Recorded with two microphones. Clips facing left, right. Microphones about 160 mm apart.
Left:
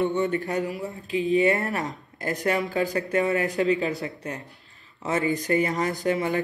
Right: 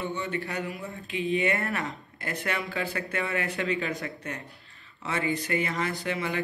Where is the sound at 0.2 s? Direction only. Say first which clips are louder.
Left 7 dB; 40° left (ahead or behind).